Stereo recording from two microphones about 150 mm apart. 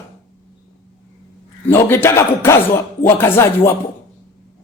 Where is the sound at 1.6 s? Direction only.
15° left (ahead or behind).